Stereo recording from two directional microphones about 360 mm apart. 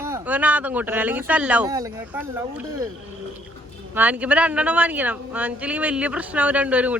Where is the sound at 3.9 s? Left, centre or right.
Centre.